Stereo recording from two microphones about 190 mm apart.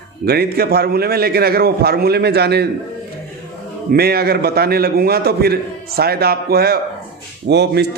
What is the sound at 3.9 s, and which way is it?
Speech, 55° right (ahead or behind).